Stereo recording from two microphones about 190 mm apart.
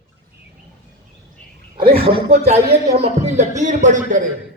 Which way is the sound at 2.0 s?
30° right (ahead or behind).